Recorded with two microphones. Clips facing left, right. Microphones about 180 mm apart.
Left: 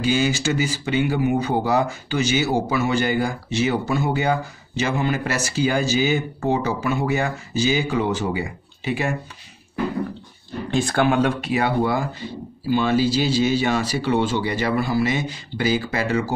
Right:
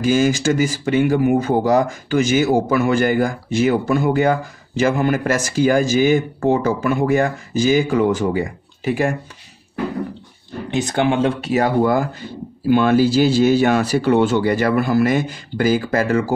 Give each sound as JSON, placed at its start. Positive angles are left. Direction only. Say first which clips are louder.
{"t": 0.0, "sound": "speech", "louder": "right 5 dB", "side_deg": -45}
{"t": 10.7, "sound": "speech", "louder": "right 1 dB", "side_deg": -20}
{"t": 11.4, "sound": "speech", "louder": "right 4 dB", "side_deg": -45}